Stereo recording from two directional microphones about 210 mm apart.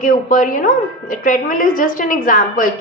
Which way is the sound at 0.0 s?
40° left (ahead or behind).